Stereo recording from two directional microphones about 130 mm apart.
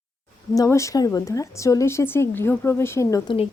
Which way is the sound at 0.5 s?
25° left (ahead or behind).